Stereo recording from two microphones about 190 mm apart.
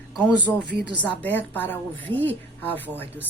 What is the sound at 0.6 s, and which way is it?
Speech, 60° right (ahead or behind).